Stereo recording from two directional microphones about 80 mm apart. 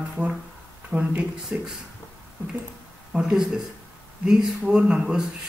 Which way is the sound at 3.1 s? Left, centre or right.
Centre.